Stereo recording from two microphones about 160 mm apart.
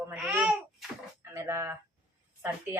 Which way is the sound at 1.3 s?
15° right (ahead or behind).